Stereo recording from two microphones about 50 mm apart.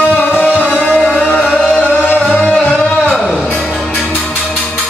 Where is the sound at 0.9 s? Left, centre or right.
Centre.